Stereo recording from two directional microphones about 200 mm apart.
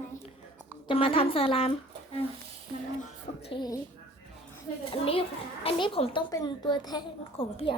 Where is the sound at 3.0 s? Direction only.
30° left (ahead or behind).